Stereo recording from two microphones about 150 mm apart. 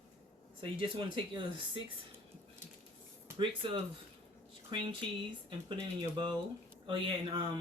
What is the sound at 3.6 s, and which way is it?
Speech, 35° right (ahead or behind).